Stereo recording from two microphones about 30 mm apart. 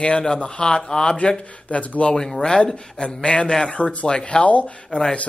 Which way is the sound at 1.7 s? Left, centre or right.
Left.